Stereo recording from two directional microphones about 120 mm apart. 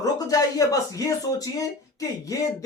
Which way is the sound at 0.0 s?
30° left (ahead or behind).